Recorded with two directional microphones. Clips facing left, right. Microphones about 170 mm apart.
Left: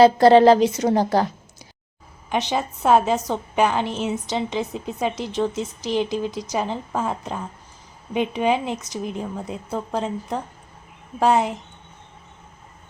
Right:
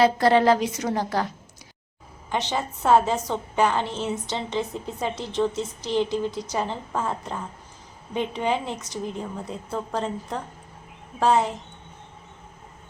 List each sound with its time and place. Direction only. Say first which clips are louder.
0.0 s a woman's voice: left 6 dB; 30° left (ahead or behind)
2.3 s a woman's voice: left 3 dB; 15° left (ahead or behind)